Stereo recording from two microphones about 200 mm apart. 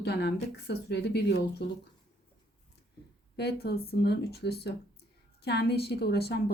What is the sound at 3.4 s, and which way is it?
A woman's voice, 55° left (ahead or behind).